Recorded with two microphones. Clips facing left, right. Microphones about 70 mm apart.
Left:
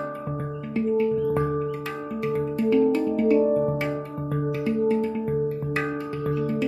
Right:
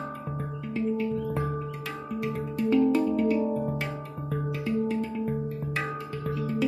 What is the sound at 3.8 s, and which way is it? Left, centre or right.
Music, centre.